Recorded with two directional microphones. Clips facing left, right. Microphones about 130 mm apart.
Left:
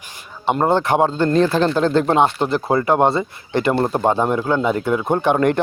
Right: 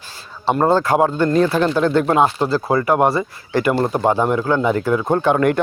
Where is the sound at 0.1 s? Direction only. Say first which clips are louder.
Right 1 dB; 20° left (ahead or behind).